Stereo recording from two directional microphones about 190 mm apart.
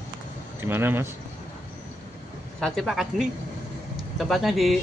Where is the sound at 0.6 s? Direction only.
10° right (ahead or behind).